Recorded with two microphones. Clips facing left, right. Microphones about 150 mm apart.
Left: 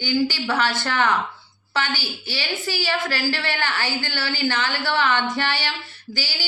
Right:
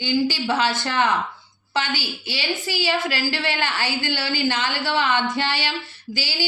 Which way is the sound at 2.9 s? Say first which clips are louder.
Right 1 dB; 20° right (ahead or behind).